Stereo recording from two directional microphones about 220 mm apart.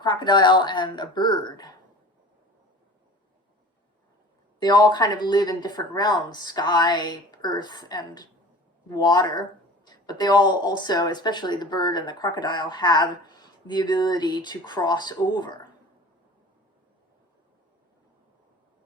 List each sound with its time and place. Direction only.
0.0 s a woman's voice: 20° left (ahead or behind)
4.6 s a woman's voice: 20° left (ahead or behind)